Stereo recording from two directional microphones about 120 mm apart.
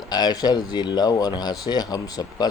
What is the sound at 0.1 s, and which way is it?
Speech, 35° left (ahead or behind).